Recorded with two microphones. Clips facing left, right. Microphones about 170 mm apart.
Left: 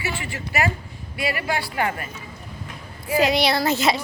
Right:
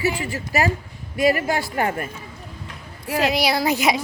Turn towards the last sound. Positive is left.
turn(degrees=-15)  # may be behind; listen again after turning